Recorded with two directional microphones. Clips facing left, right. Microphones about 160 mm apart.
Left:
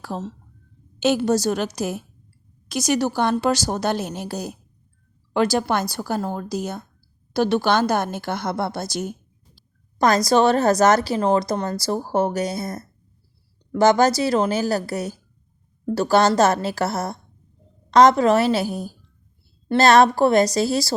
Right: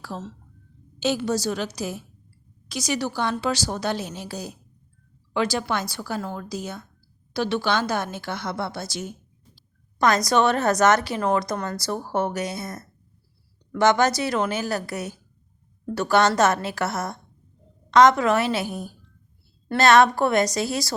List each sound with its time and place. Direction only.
0.0 s a woman's voice: 50° left (ahead or behind); by 20.9 s 30° left (ahead or behind)